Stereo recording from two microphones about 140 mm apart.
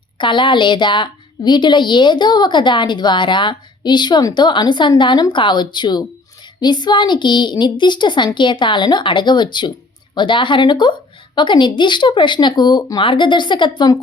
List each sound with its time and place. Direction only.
0.2 s a woman's voice: 35° left (ahead or behind)